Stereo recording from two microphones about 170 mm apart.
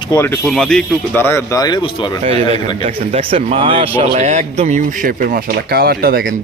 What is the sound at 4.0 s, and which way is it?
Speech, 40° right (ahead or behind).